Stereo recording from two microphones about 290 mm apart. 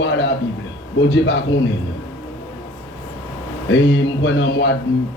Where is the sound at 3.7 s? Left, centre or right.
Left.